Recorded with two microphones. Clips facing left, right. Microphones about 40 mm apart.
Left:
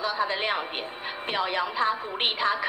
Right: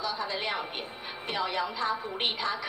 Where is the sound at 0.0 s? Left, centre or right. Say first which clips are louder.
Left 5 dB; left.